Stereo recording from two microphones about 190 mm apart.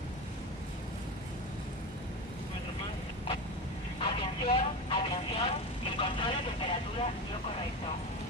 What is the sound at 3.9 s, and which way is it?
Vehicle, 30° left (ahead or behind).